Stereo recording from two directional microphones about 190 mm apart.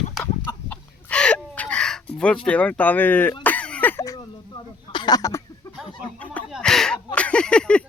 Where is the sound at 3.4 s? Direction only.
5° left (ahead or behind).